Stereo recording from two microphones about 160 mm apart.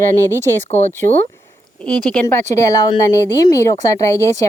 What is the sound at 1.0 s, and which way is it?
Speech, 60° right (ahead or behind).